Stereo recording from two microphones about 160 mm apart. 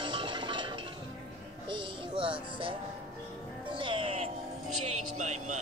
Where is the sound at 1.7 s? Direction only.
30° right (ahead or behind).